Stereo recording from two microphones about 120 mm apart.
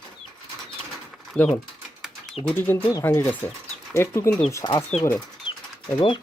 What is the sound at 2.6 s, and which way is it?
Speech, 15° left (ahead or behind).